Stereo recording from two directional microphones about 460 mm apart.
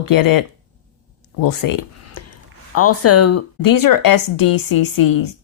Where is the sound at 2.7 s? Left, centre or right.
Left.